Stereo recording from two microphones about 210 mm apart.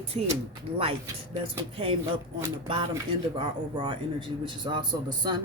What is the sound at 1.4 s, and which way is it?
A woman's voice, 25° right (ahead or behind).